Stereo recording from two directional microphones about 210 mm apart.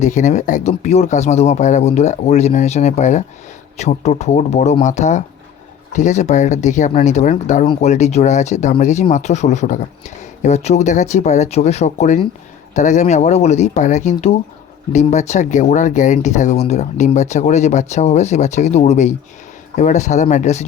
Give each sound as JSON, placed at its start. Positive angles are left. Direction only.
{"t": 0.0, "sound": "speech", "side_deg": 35}